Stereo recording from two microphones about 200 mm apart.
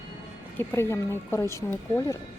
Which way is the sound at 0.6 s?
10° left (ahead or behind).